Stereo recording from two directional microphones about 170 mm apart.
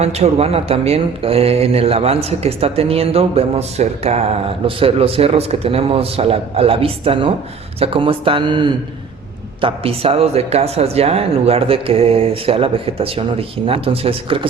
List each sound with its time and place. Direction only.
0.0 s speech: 40° right (ahead or behind)